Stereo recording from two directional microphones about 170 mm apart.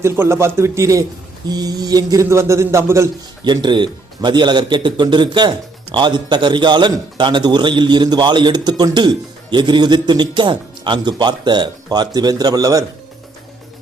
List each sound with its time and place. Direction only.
0.0 s a man's voice: 15° right (ahead or behind)